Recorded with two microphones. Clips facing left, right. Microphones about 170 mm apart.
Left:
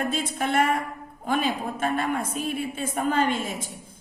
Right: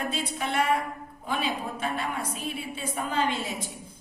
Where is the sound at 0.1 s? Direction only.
50° left (ahead or behind).